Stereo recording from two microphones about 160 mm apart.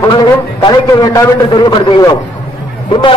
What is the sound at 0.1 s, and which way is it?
A man's voice, 25° left (ahead or behind).